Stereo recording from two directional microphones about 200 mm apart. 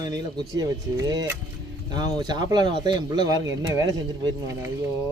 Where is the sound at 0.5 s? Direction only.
20° right (ahead or behind).